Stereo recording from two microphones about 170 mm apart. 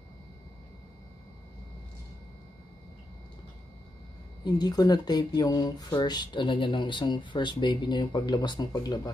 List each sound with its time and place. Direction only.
4.5 s speech: 25° left (ahead or behind)